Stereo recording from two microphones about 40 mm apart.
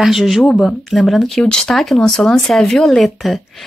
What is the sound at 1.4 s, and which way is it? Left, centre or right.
Speech, centre.